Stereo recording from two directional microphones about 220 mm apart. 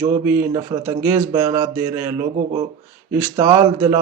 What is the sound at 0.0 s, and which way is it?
A man's voice, 15° right (ahead or behind).